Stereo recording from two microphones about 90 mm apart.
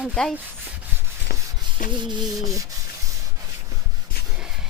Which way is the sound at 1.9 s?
60° right (ahead or behind).